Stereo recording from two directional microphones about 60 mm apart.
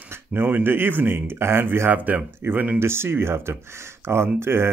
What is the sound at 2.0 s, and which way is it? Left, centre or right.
Speech, right.